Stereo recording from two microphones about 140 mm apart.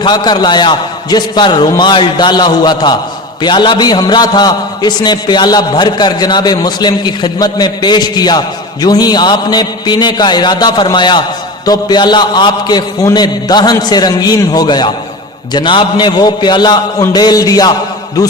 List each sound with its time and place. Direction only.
0.0 s a man's voice: 30° left (ahead or behind)